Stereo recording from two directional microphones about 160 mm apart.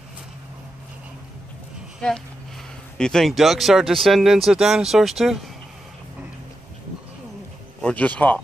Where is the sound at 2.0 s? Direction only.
5° left (ahead or behind).